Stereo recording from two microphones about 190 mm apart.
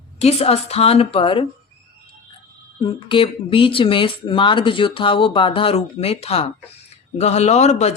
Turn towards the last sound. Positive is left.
turn(degrees=35)  # may be behind; listen again after turning